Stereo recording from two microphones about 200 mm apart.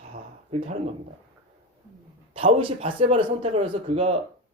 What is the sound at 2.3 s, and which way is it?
Speech, 25° right (ahead or behind).